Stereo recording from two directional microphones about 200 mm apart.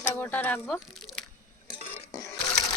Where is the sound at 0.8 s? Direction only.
Centre (ahead or behind).